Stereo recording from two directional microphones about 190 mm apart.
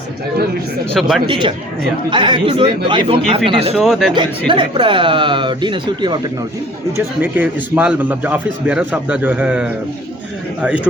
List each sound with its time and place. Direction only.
1.0 s speech: centre (ahead or behind)
1.3 s a man's voice: 25° right (ahead or behind)
3.8 s speech: centre (ahead or behind)
4.1 s a man's voice: 25° right (ahead or behind)
6.9 s a man's voice: 10° right (ahead or behind)